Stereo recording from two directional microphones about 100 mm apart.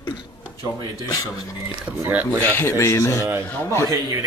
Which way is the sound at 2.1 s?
15° right (ahead or behind).